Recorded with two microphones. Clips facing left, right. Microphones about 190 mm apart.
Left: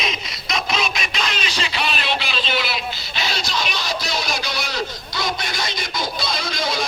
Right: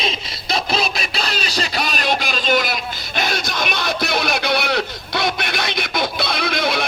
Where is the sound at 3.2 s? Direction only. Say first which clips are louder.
Right 3 dB; 50° right (ahead or behind).